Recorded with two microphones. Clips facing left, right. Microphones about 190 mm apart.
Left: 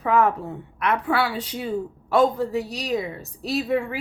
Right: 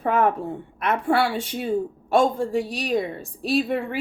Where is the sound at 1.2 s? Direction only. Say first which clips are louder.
Right 2 dB; 25° right (ahead or behind).